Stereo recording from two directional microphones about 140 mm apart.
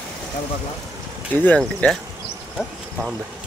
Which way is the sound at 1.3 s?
15° left (ahead or behind).